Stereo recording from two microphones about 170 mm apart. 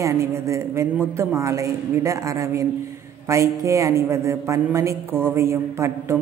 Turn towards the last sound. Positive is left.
turn(degrees=-15)  # may be behind; listen again after turning